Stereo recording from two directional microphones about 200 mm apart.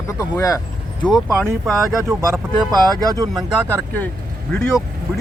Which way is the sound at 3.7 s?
10° left (ahead or behind).